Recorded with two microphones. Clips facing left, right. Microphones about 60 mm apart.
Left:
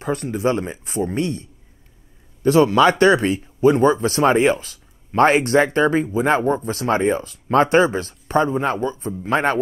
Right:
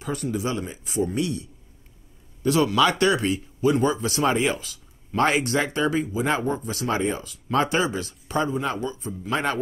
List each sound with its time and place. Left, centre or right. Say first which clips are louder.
0.0 s speech: left 6 dB; left